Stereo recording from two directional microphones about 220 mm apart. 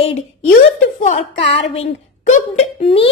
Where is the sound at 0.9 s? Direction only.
35° left (ahead or behind).